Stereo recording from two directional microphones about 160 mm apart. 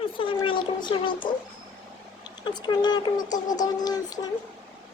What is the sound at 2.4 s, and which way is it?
Speech, 25° left (ahead or behind).